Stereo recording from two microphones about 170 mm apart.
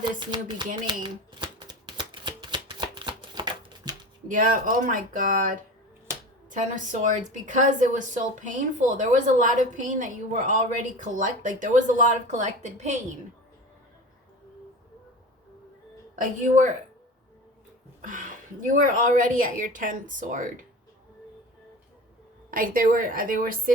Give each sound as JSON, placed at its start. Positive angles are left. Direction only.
{"t": 0.0, "sound": "a sound", "side_deg": -25}
{"t": 1.0, "sound": "shuffling cards", "side_deg": -25}
{"t": 4.3, "sound": "a woman's voice", "side_deg": -50}
{"t": 16.1, "sound": "a woman's voice", "side_deg": -50}
{"t": 18.0, "sound": "a woman's voice", "side_deg": -50}
{"t": 22.4, "sound": "a woman's voice", "side_deg": -55}